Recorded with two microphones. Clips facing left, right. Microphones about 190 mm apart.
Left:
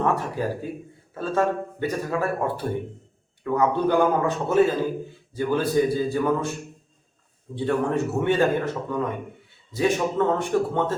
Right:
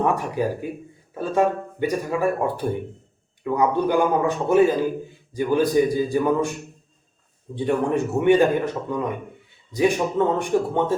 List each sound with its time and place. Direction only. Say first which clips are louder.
0.0 s speech: right 2 dB; 15° right (ahead or behind)
7.5 s speech: right 2 dB; 15° right (ahead or behind)